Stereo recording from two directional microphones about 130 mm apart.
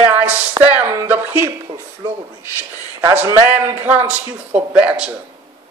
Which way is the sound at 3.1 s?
20° right (ahead or behind).